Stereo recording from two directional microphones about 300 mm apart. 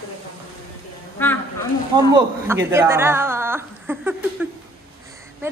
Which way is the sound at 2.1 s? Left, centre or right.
Centre.